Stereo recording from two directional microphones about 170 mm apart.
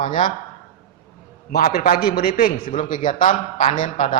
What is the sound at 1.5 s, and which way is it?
A man's voice, 60° left (ahead or behind).